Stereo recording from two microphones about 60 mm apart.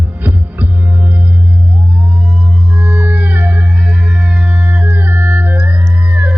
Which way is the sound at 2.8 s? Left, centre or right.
Right.